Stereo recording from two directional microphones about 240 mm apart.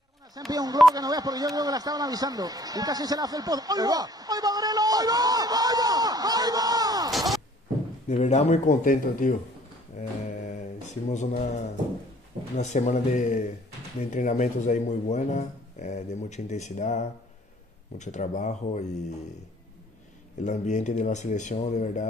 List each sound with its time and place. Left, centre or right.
0.5 s speech: centre
7.1 s a sound: centre
8.1 s speech: left
9.9 s mantra: left
12.5 s speech: left
20.4 s speech: left